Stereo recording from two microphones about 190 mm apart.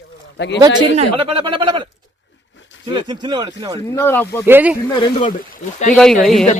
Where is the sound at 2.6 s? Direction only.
75° left (ahead or behind).